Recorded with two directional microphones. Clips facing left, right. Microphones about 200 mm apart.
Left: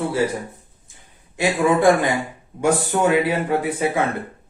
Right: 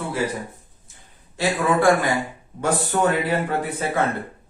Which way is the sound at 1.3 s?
20° left (ahead or behind).